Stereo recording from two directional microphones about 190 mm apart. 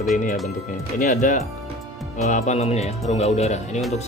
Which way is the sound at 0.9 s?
40° left (ahead or behind).